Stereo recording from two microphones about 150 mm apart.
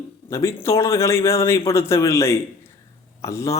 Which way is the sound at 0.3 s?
20° left (ahead or behind).